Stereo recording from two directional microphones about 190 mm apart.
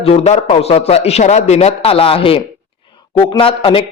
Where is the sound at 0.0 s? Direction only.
30° left (ahead or behind).